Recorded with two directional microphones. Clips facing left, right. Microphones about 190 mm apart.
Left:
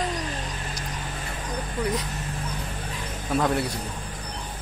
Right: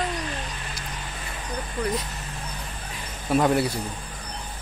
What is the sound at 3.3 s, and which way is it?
Speech, 5° right (ahead or behind).